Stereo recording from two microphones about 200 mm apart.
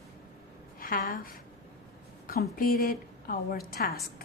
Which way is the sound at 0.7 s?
45° left (ahead or behind).